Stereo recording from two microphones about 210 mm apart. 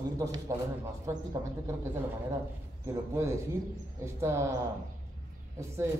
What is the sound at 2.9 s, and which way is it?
Speech, 10° right (ahead or behind).